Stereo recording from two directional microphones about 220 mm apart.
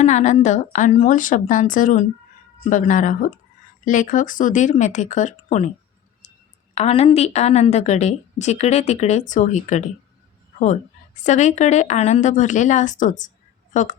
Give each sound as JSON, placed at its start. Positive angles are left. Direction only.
{"t": 0.0, "sound": "a woman's voice", "side_deg": 30}
{"t": 6.7, "sound": "a woman's voice", "side_deg": 30}